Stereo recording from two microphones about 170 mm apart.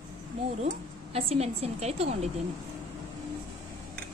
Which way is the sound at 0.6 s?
35° right (ahead or behind).